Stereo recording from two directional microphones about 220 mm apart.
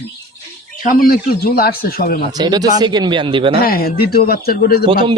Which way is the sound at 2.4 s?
20° right (ahead or behind).